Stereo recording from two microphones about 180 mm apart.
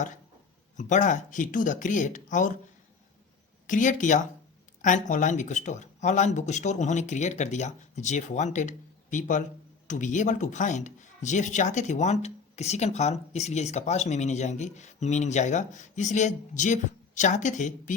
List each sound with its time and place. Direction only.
0.8 s speech: 45° left (ahead or behind)
3.7 s speech: 45° left (ahead or behind)